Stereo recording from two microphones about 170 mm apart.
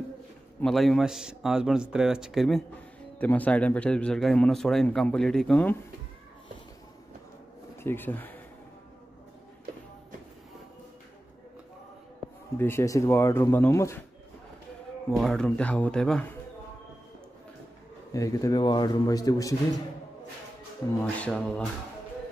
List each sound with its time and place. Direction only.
0.6 s a man's voice: centre (ahead or behind)
7.7 s speech: 15° left (ahead or behind)
12.5 s speech: 15° left (ahead or behind)
15.0 s a man's voice: centre (ahead or behind)
18.1 s a man's voice: 20° left (ahead or behind)
21.0 s speech: 5° left (ahead or behind)